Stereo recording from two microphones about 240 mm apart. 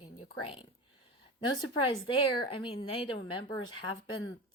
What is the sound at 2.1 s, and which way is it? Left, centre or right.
Speech, left.